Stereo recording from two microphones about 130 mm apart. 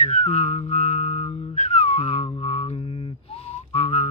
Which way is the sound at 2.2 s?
45° left (ahead or behind).